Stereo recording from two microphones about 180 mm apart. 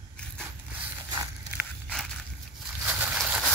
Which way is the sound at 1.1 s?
15° right (ahead or behind).